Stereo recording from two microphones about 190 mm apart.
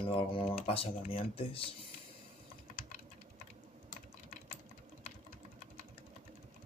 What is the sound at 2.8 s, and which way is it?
Typing, 40° left (ahead or behind).